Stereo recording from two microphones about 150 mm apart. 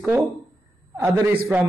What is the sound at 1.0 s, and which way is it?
Speech, 15° right (ahead or behind).